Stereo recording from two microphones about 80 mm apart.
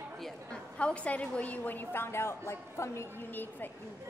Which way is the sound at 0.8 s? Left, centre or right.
Centre.